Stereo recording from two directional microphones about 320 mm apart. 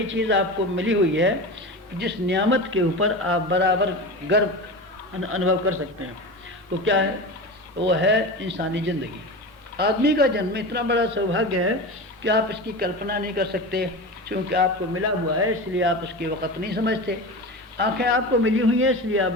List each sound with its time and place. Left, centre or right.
0.1 s a man's voice: right
5.2 s a man's voice: right
7.9 s a man's voice: right